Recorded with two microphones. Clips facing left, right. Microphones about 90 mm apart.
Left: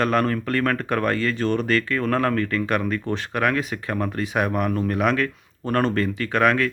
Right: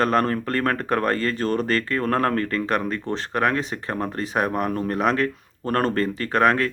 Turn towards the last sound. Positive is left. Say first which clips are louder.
# even
turn(degrees=-35)  # may be behind; listen again after turning